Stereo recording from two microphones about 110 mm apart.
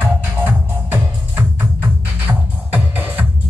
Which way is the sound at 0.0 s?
20° right (ahead or behind).